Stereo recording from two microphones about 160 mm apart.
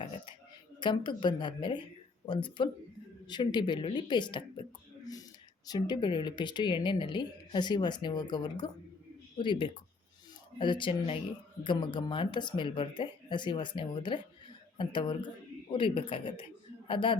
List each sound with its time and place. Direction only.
0.8 s speech: 30° left (ahead or behind)
5.6 s a man's voice: 25° left (ahead or behind)